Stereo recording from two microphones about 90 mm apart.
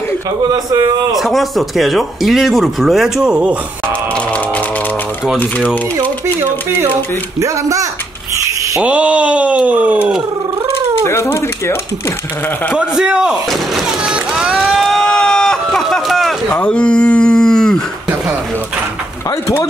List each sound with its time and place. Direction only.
1.1 s speech: centre (ahead or behind)
7.3 s speech: 35° right (ahead or behind)
8.8 s speech: 15° right (ahead or behind)
11.1 s speech: 30° left (ahead or behind)
12.7 s speech: 10° right (ahead or behind)
14.0 s a sound: 10° right (ahead or behind)
14.8 s run: 5° left (ahead or behind)
16.5 s speech: 10° left (ahead or behind)
19.4 s speech: 30° left (ahead or behind)